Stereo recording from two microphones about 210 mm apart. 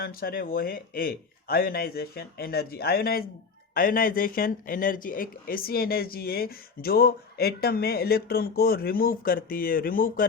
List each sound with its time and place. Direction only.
0.0 s speech: 45° left (ahead or behind)